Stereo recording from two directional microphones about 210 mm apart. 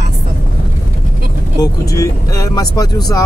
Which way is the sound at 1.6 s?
15° left (ahead or behind).